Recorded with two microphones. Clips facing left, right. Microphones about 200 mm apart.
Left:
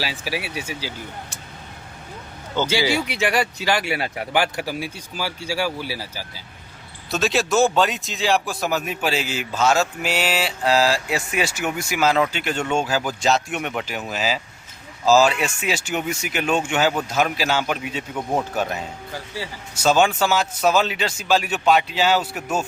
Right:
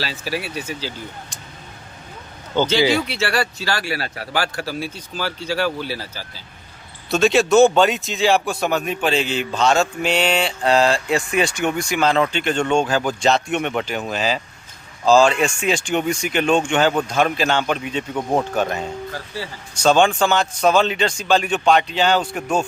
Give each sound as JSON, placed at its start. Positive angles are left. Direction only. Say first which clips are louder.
{"t": 0.0, "sound": "speech", "louder": "right 1 dB", "side_deg": 10}
{"t": 2.5, "sound": "speech", "louder": "right 4 dB", "side_deg": -55}
{"t": 2.9, "sound": "a man's voice", "louder": "right 1 dB", "side_deg": 15}